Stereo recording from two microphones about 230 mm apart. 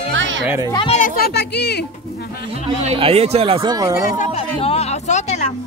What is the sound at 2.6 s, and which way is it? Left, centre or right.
Speech, right.